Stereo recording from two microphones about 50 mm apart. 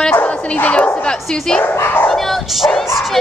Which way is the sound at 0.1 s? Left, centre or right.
Left.